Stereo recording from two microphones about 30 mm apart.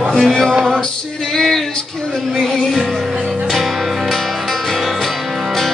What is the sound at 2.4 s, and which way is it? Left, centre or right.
Music, centre.